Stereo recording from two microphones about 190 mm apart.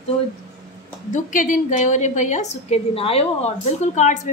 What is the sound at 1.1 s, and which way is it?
A woman's voice, 45° left (ahead or behind).